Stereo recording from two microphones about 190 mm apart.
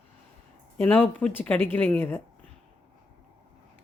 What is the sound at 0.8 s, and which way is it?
Speech, 10° left (ahead or behind).